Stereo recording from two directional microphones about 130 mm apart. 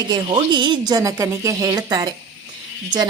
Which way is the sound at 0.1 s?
35° right (ahead or behind).